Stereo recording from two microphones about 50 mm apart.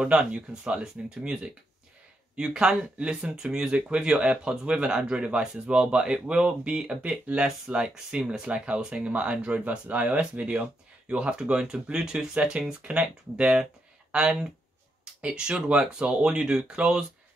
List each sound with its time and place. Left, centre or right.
0.0 s speech: centre
7.0 s speech: right
7.4 s speech: centre